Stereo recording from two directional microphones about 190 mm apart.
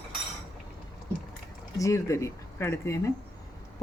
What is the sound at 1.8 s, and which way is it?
A woman's voice, 15° left (ahead or behind).